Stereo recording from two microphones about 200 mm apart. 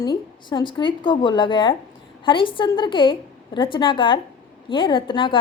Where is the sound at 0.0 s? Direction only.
20° left (ahead or behind).